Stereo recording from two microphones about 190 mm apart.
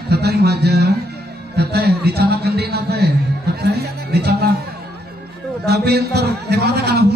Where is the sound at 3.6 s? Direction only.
55° right (ahead or behind).